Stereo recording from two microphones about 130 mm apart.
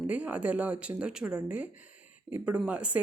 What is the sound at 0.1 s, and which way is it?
Speech, 10° right (ahead or behind).